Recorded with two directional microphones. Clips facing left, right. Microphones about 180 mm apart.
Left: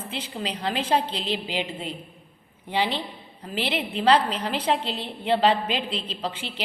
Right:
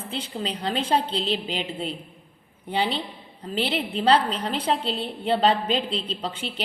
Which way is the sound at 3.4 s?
30° right (ahead or behind).